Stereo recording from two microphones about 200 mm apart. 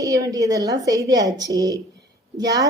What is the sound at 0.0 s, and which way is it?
A woman's voice, 15° right (ahead or behind).